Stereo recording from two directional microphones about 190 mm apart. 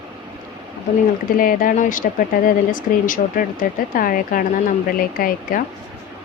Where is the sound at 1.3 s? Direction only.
45° left (ahead or behind).